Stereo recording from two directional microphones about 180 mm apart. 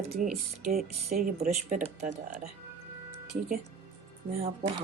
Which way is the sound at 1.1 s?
45° right (ahead or behind).